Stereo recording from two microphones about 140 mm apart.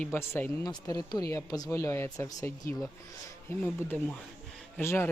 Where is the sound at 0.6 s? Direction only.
25° left (ahead or behind).